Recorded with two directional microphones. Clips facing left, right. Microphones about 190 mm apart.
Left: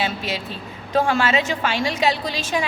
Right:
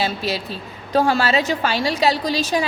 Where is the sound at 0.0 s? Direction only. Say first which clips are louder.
Right 2 dB; 35° right (ahead or behind).